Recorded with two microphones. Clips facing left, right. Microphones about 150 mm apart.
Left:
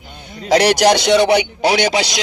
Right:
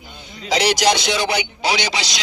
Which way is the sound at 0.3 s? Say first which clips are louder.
Left 6 dB; 60° left (ahead or behind).